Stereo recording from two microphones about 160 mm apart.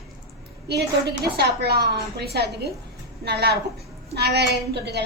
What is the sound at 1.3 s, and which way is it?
A woman's voice, 85° right.